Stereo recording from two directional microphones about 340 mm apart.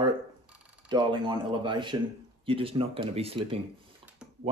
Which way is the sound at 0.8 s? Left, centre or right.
Centre.